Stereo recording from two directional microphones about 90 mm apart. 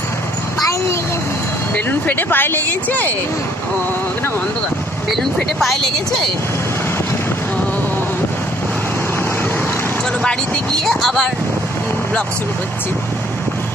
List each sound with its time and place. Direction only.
1.9 s speech: 20° left (ahead or behind)
5.1 s speech: centre (ahead or behind)
10.9 s speech: 5° left (ahead or behind)